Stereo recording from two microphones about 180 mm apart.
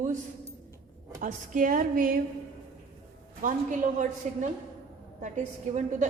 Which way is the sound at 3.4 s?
45° right (ahead or behind).